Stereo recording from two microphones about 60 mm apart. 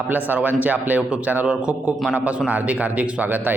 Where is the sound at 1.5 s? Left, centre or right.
Centre.